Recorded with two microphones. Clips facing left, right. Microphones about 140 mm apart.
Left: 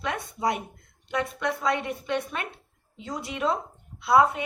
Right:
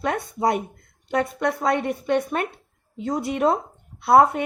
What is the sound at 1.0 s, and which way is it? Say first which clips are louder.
A woman's voice: right 5 dB; 45° right (ahead or behind).